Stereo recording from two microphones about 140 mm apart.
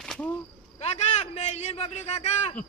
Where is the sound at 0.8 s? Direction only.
50° left (ahead or behind).